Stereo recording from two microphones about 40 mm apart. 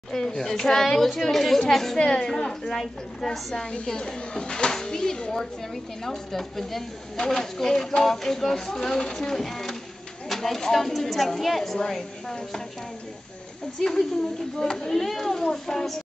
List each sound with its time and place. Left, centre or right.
0.1 s speech: centre
2.0 s a woman's voice: left
13.7 s speech: centre